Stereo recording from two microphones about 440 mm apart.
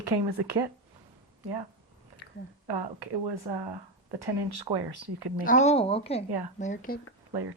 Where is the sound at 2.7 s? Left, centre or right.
Right.